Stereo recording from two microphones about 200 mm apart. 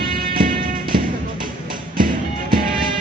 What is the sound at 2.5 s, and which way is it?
Music, 45° right (ahead or behind).